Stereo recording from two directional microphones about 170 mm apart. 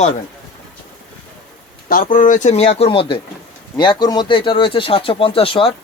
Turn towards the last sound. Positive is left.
turn(degrees=35)  # may be behind; listen again after turning